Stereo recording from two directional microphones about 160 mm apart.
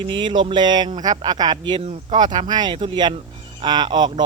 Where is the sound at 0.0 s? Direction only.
30° right (ahead or behind).